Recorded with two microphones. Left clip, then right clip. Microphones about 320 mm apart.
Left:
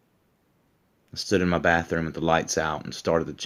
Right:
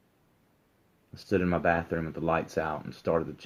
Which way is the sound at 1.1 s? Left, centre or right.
Left.